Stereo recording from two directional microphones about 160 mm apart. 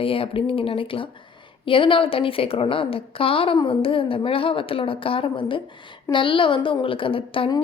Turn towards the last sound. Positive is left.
turn(degrees=35)  # may be behind; listen again after turning